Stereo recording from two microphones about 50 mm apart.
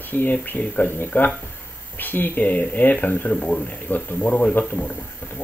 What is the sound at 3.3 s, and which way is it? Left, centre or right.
Speech, centre.